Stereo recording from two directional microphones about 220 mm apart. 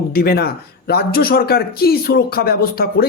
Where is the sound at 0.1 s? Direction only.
45° left (ahead or behind).